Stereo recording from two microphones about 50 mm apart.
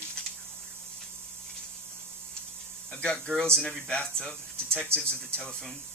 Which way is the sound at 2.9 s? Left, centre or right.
Centre.